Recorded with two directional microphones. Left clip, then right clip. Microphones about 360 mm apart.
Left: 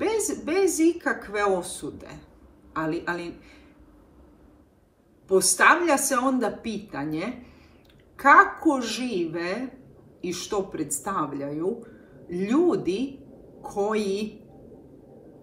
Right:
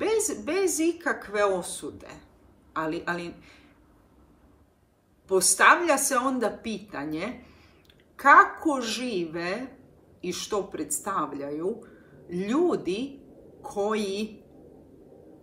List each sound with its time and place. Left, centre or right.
0.0 s speech: centre
5.3 s speech: centre